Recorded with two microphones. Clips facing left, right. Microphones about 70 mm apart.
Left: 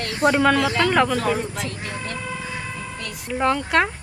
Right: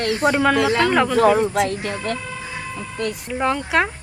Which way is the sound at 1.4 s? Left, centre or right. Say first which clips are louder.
Right 9 dB; right.